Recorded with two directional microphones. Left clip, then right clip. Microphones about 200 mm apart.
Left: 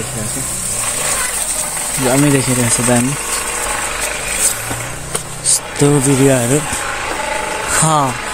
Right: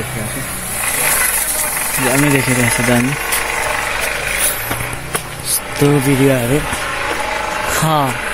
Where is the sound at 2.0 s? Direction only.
55° left (ahead or behind).